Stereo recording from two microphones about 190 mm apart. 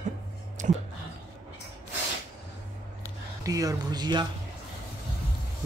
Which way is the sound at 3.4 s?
20° right (ahead or behind).